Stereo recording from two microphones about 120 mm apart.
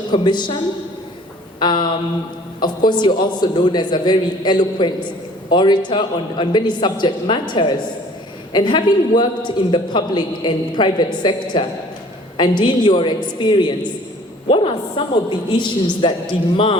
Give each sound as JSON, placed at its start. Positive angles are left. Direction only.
{"t": 0.1, "sound": "a man's voice", "side_deg": 40}
{"t": 1.5, "sound": "a sound", "side_deg": 40}
{"t": 2.6, "sound": "a man's voice", "side_deg": 40}